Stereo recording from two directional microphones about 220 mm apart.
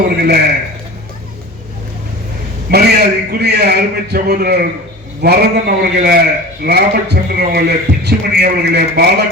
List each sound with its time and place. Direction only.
0.2 s a man's voice: 45° right (ahead or behind)
2.6 s a man's voice: 45° right (ahead or behind)